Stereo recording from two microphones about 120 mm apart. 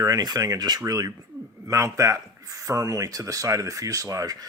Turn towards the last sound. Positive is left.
turn(degrees=-25)  # may be behind; listen again after turning